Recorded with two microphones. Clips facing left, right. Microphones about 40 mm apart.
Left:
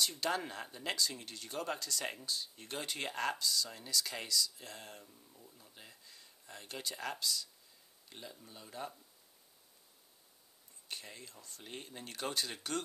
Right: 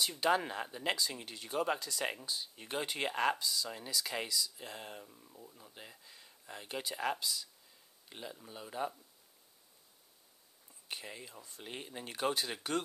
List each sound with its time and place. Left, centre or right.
0.0 s speech: centre
10.9 s speech: centre